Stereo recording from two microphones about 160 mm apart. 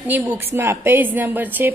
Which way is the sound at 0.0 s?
10° right (ahead or behind).